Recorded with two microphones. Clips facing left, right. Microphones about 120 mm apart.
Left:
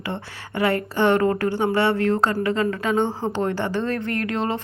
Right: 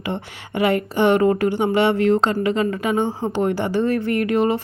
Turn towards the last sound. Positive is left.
turn(degrees=-10)  # may be behind; listen again after turning